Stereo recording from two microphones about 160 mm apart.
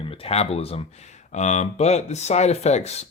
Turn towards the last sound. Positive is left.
turn(degrees=40)  # may be behind; listen again after turning